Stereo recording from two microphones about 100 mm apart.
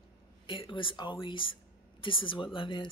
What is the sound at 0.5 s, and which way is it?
Speech, 55° left (ahead or behind).